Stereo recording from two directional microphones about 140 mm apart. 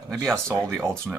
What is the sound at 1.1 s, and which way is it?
Speech, 10° right (ahead or behind).